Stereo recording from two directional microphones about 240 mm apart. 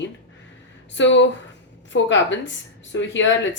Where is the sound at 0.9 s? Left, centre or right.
Left.